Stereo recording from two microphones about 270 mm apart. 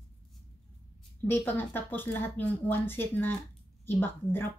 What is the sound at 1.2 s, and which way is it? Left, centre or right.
Speech, centre.